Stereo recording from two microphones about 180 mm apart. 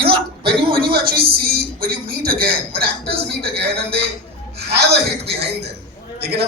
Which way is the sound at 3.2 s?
65° right (ahead or behind).